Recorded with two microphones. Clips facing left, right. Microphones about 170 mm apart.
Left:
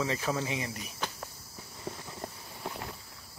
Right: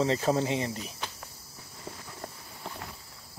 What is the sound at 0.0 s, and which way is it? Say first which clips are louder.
Speech: right 6 dB; 30° right (ahead or behind).